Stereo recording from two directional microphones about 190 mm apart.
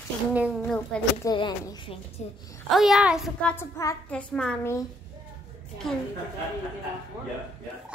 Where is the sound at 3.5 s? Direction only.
15° left (ahead or behind).